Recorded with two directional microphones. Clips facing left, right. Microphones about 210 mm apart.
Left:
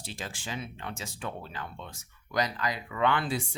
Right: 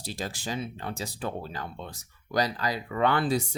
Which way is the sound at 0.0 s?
40° right (ahead or behind).